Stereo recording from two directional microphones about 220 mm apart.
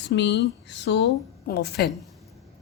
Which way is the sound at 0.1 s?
50° left (ahead or behind).